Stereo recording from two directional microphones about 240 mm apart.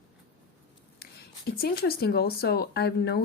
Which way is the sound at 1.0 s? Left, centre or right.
Left.